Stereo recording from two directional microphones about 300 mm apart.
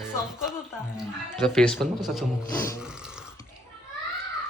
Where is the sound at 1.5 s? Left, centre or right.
Centre.